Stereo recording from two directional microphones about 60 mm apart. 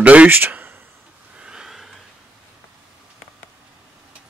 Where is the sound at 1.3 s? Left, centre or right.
Centre.